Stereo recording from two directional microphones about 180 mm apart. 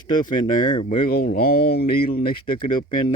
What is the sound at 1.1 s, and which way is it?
Speech, 55° left (ahead or behind).